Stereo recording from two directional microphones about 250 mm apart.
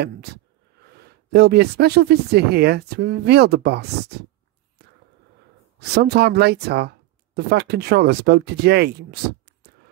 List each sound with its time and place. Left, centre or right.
0.0 s speech: right
5.8 s speech: right